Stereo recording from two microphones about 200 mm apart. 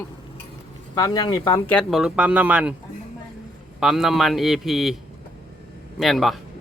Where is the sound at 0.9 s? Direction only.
20° left (ahead or behind).